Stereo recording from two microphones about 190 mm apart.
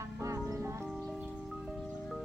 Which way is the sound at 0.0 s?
15° right (ahead or behind).